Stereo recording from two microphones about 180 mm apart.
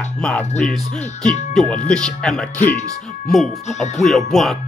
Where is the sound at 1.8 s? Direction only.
5° left (ahead or behind).